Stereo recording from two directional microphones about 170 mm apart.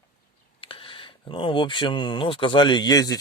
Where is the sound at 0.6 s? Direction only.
30° left (ahead or behind).